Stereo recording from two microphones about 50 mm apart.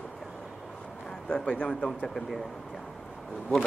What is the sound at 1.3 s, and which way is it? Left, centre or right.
Speech, left.